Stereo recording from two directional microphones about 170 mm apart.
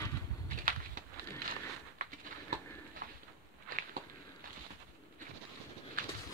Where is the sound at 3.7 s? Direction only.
55° right (ahead or behind).